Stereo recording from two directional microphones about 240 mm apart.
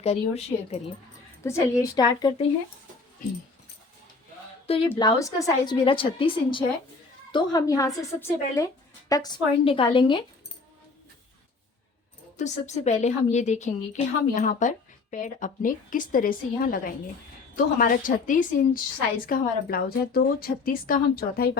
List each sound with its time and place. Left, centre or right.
0.0 s a woman's voice: left
4.9 s a woman's voice: centre
12.4 s a woman's voice: left